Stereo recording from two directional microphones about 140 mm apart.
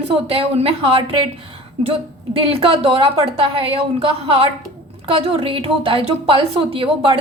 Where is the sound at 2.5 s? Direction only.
40° right (ahead or behind).